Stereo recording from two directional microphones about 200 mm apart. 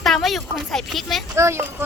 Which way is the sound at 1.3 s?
15° right (ahead or behind).